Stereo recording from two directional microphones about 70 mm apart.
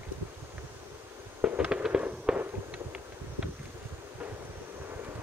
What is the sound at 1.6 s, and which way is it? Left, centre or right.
Fireworks, centre.